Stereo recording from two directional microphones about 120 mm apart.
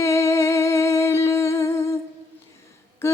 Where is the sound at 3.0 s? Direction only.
20° left (ahead or behind).